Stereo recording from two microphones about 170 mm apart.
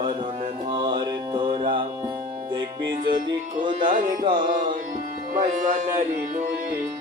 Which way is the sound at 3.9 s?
55° right (ahead or behind).